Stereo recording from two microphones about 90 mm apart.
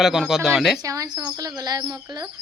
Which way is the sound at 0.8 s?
40° right (ahead or behind).